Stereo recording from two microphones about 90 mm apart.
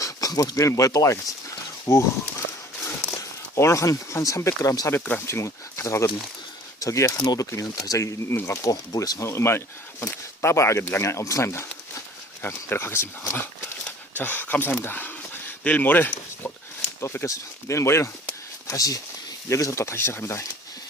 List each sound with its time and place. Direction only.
0.0 s speech: 40° left (ahead or behind)
4.9 s speech: 20° left (ahead or behind)
5.2 s speech: 30° left (ahead or behind)
18.7 s speech: 40° left (ahead or behind)